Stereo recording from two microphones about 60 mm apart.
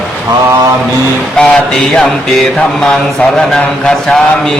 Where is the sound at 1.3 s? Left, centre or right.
Centre.